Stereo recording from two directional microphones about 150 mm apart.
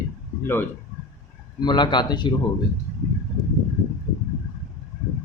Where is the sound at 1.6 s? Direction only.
30° left (ahead or behind).